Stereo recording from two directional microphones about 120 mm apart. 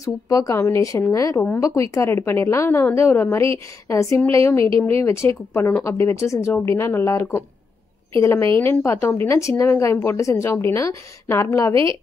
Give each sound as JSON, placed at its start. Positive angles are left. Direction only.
{"t": 0.0, "sound": "speech", "side_deg": 30}